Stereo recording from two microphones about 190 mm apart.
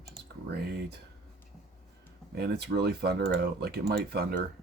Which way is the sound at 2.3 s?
55° right (ahead or behind).